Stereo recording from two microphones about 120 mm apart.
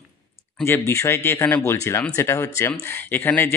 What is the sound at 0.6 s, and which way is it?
Speech, 20° left (ahead or behind).